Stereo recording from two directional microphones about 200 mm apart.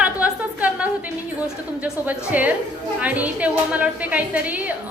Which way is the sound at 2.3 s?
10° right (ahead or behind).